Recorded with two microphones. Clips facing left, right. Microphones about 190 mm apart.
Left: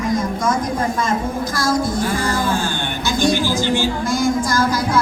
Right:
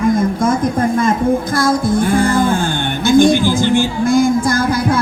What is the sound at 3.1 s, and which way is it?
Speech, 55° right (ahead or behind).